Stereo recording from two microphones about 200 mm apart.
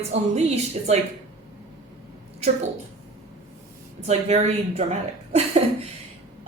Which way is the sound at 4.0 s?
35° right (ahead or behind).